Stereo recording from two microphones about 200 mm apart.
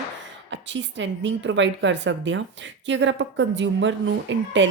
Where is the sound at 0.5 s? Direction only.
65° right (ahead or behind).